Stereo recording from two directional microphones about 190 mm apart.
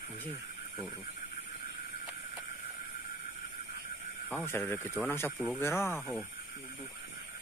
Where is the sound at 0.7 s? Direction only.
20° right (ahead or behind).